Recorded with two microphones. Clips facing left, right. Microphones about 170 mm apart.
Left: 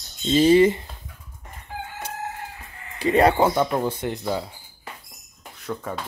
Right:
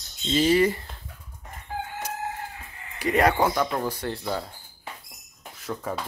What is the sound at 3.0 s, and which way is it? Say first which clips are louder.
Speech: left 4 dB; 30° left (ahead or behind).